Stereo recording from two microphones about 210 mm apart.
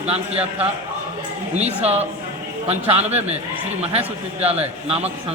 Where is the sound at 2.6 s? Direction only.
30° right (ahead or behind).